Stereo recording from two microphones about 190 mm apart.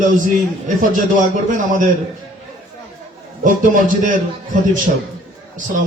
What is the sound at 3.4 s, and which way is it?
A man's voice, 45° right (ahead or behind).